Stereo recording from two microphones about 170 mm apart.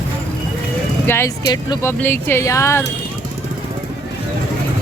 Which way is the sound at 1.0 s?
15° left (ahead or behind).